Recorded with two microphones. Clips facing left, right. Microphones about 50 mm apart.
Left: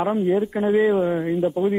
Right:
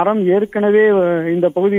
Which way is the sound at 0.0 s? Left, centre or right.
Right.